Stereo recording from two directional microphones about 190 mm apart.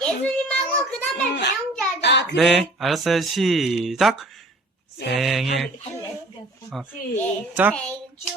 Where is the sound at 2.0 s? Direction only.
65° left (ahead or behind).